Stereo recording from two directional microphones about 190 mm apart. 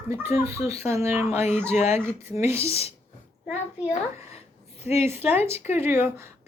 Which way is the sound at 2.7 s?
30° left (ahead or behind).